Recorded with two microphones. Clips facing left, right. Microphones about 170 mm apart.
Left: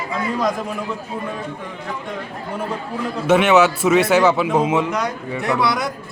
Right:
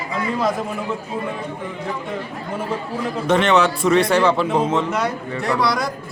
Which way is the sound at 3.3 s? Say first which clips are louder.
Left 3 dB; 5° left (ahead or behind).